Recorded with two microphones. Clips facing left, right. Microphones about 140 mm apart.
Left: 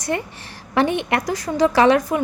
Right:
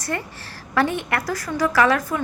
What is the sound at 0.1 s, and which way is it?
A woman's voice, 20° left (ahead or behind).